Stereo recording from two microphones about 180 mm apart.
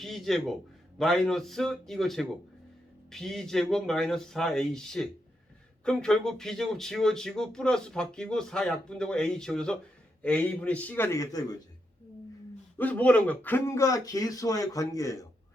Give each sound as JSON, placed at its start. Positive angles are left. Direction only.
{"t": 0.0, "sound": "a man's voice", "side_deg": 0}
{"t": 12.7, "sound": "speech", "side_deg": 10}